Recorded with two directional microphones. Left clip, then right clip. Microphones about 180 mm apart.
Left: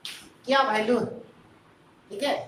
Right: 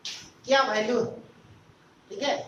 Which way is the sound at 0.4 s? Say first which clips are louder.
Even; 20° left (ahead or behind).